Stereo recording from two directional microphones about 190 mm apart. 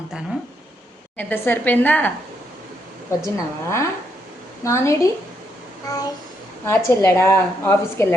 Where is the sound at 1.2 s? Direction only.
10° left (ahead or behind).